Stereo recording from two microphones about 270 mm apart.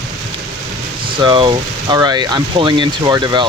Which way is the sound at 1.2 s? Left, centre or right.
Centre.